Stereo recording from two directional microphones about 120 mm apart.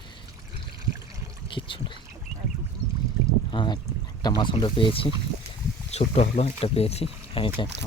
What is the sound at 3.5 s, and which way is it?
Speech, 40° left (ahead or behind).